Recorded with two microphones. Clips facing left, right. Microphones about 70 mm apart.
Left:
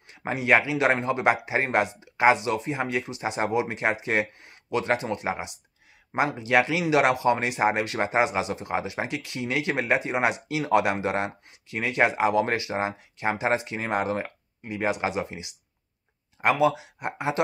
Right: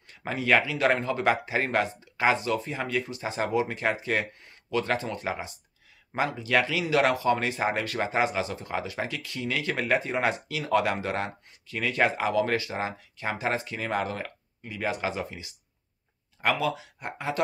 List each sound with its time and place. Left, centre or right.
0.1 s speech: centre